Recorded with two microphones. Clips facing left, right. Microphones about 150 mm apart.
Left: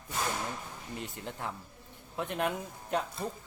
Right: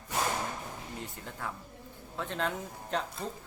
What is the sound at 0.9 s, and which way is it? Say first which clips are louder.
Speech: left 2 dB; 20° left (ahead or behind).